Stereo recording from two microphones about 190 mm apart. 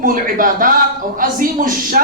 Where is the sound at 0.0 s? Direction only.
45° right (ahead or behind).